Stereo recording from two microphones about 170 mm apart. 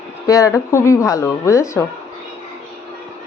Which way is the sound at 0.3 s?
20° left (ahead or behind).